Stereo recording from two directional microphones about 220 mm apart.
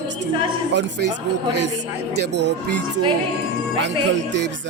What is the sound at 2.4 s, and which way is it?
Speech, 50° right (ahead or behind).